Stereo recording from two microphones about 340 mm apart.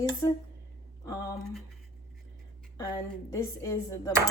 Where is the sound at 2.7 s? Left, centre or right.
Centre.